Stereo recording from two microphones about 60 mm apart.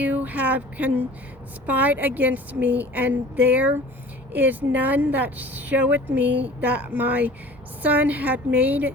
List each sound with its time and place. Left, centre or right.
0.0 s speech: right